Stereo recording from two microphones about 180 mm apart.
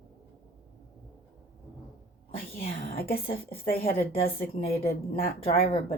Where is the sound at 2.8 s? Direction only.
55° left (ahead or behind).